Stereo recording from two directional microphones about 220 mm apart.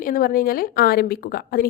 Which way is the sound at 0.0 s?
40° left (ahead or behind).